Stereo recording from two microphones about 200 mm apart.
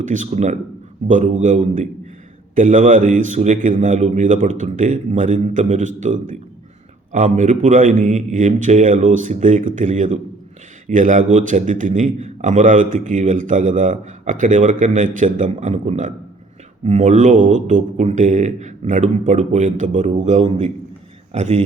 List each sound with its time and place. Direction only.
0.0 s a man's voice: 40° right (ahead or behind)